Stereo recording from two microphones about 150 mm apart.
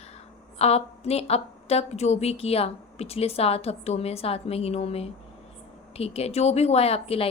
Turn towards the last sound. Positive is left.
turn(degrees=40)  # may be behind; listen again after turning